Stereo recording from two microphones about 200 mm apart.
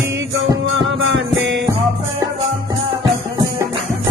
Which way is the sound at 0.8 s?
70° right (ahead or behind).